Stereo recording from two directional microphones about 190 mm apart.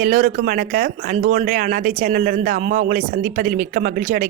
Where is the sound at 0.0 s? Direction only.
50° right (ahead or behind).